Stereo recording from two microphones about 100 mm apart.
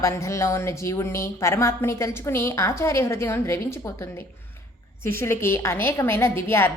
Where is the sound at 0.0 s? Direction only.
30° left (ahead or behind).